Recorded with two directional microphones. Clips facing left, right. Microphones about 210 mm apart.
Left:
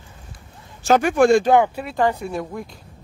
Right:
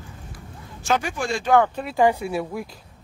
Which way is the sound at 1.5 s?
10° left (ahead or behind).